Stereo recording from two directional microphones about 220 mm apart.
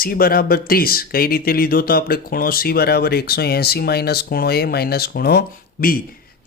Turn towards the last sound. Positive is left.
turn(degrees=45)  # may be behind; listen again after turning